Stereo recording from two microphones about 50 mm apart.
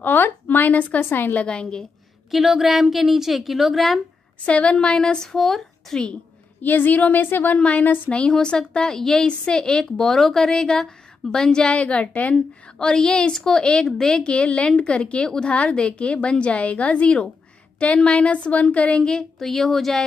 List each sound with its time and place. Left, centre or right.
0.0 s a woman's voice: left
1.3 s a woman's voice: left
2.3 s a woman's voice: centre
4.5 s speech: left; by 6.0 s centre
6.6 s a woman's voice: left
7.5 s a woman's voice: left
8.3 s speech: centre
11.7 s a woman's voice: left
12.4 s a woman's voice: centre
19.0 s a woman's voice: centre